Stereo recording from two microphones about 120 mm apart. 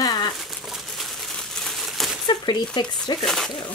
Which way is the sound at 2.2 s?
35° left (ahead or behind).